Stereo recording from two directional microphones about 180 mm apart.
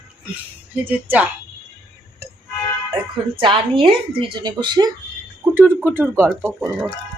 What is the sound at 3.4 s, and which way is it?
A woman's voice, 25° right (ahead or behind).